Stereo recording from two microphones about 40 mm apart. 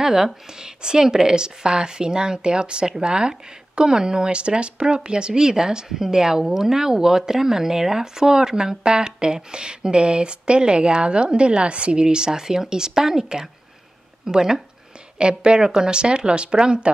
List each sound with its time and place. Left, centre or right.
0.0 s speech: centre